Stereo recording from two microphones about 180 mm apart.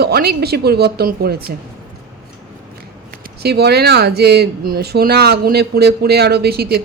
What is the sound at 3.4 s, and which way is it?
A woman's voice, 65° right (ahead or behind).